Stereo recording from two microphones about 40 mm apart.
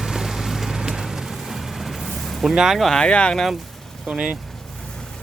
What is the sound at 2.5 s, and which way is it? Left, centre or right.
Speech, centre.